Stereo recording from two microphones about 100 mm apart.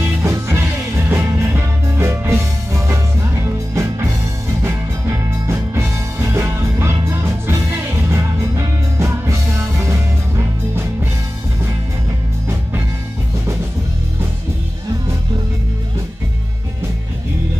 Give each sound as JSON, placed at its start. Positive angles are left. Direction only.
{"t": 0.0, "sound": "music", "side_deg": -25}